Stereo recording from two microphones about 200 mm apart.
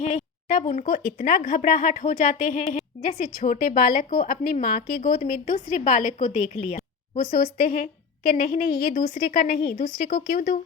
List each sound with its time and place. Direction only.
0.0 s speech: 35° left (ahead or behind)